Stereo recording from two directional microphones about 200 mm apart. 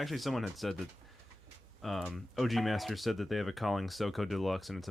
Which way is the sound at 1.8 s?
Centre (ahead or behind).